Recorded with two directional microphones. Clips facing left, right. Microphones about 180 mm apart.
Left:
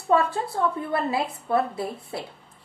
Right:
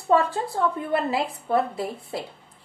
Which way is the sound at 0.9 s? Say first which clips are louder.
Right 1 dB; 20° right (ahead or behind).